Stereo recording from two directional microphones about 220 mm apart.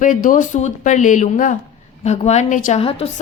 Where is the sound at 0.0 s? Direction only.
35° left (ahead or behind).